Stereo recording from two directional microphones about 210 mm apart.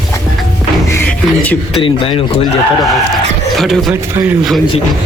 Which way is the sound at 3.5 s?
Centre (ahead or behind).